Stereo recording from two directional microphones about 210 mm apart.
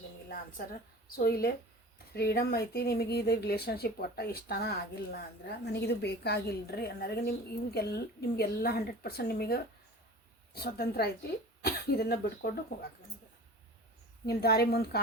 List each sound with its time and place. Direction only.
1.1 s a woman's voice: 45° left (ahead or behind)
14.3 s a woman's voice: 50° left (ahead or behind)